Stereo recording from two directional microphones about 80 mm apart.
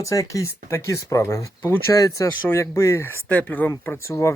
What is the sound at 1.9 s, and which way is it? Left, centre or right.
Speech, left.